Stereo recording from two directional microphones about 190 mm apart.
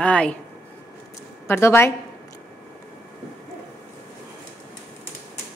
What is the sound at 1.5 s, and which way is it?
Speech, 15° left (ahead or behind).